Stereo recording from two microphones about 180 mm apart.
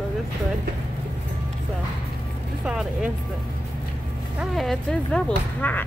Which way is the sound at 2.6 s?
5° right (ahead or behind).